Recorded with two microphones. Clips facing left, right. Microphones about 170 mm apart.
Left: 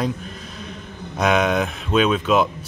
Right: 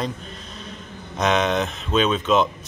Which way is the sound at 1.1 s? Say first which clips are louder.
Left 2 dB; 5° left (ahead or behind).